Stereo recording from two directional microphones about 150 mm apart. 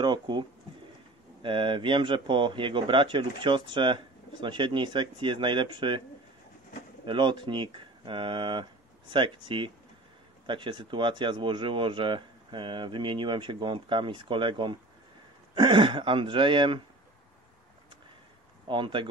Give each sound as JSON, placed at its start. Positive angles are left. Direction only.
{"t": 0.0, "sound": "speech", "side_deg": -30}
{"t": 7.1, "sound": "speech", "side_deg": -30}
{"t": 18.7, "sound": "speech", "side_deg": -35}